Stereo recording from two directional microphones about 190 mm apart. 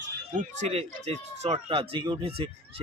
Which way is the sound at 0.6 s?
35° right (ahead or behind).